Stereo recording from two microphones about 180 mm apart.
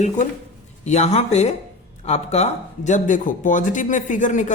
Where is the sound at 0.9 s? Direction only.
40° left (ahead or behind).